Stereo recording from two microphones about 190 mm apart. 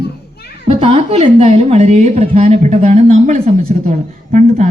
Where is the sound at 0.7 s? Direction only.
30° right (ahead or behind).